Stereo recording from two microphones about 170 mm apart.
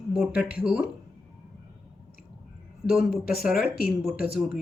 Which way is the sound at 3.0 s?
60° left (ahead or behind).